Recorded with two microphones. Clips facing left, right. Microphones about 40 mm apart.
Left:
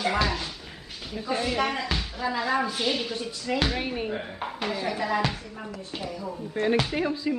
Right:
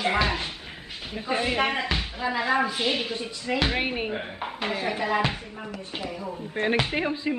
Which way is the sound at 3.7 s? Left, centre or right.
Right.